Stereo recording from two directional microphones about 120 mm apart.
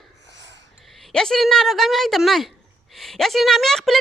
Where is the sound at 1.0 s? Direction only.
5° left (ahead or behind).